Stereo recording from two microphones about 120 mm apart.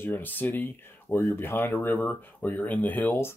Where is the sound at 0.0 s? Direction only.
15° left (ahead or behind).